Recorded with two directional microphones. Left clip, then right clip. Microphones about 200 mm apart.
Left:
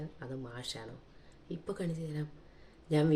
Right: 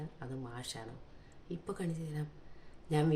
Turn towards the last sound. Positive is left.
turn(degrees=-5)  # may be behind; listen again after turning